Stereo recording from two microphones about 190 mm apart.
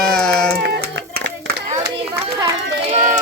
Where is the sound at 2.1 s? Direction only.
20° right (ahead or behind).